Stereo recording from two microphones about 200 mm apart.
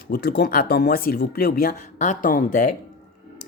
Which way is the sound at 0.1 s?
50° left (ahead or behind).